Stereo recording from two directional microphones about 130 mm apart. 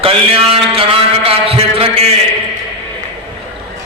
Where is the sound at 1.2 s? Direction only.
50° right (ahead or behind).